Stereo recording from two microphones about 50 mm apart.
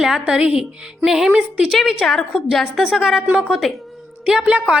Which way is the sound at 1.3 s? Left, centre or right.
Centre.